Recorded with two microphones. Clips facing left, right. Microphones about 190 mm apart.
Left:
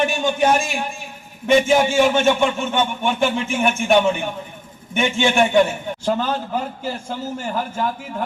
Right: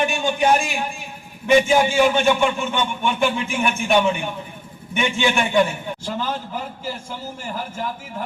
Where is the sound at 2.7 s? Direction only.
45° left (ahead or behind).